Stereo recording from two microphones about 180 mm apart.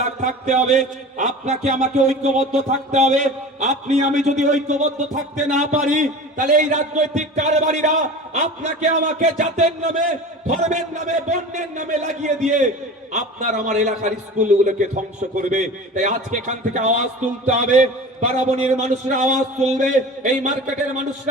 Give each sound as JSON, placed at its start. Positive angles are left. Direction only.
{"t": 0.3, "sound": "a man's voice", "side_deg": -40}